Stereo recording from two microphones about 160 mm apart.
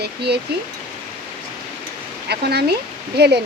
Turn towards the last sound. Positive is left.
turn(degrees=-90)